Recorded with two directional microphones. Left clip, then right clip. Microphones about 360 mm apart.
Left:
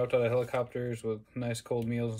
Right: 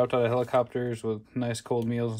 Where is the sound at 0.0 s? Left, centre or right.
Right.